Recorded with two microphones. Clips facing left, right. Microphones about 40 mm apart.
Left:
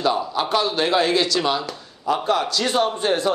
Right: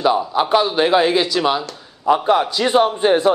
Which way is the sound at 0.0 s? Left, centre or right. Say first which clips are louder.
Right 5 dB; centre.